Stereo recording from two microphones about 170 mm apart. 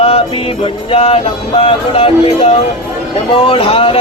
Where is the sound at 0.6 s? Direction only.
35° left (ahead or behind).